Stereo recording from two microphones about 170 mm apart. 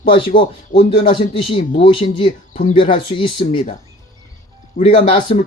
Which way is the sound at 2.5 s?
50° left (ahead or behind).